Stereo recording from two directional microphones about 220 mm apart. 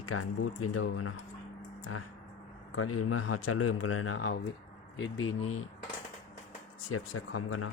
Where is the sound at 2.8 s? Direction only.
85° left; by 4.4 s 65° left (ahead or behind).